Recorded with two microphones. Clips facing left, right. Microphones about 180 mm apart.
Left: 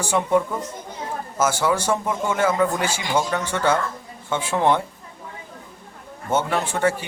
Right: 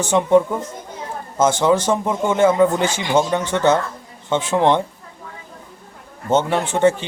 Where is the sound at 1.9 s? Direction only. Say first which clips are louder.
Right 4 dB; 25° right (ahead or behind).